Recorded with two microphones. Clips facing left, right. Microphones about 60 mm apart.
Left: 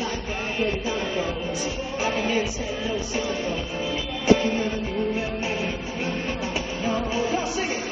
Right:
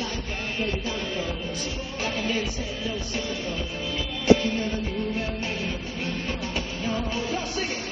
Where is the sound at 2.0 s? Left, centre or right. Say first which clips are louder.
Left 4 dB; centre.